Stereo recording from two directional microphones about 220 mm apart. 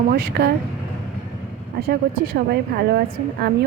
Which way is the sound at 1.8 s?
45° right (ahead or behind).